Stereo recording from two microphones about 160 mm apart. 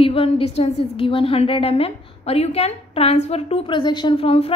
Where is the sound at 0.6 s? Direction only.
35° left (ahead or behind).